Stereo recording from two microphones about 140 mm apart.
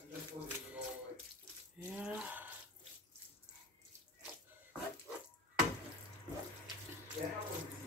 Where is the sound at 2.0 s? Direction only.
10° right (ahead or behind).